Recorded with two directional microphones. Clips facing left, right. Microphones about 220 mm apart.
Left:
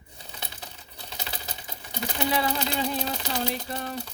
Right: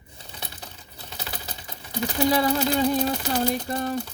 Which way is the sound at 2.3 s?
40° right (ahead or behind).